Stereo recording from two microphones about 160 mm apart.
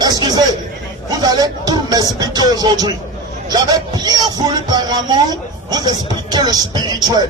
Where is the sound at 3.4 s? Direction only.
25° right (ahead or behind).